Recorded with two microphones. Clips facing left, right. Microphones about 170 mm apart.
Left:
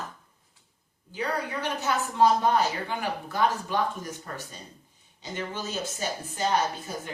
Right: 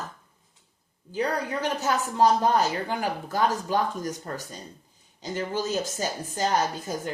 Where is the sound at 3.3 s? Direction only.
40° right (ahead or behind).